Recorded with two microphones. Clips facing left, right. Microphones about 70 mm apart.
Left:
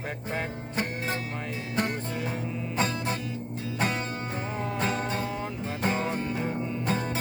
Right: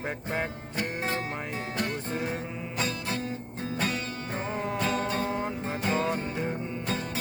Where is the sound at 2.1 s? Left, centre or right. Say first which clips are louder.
Right 1 dB; right.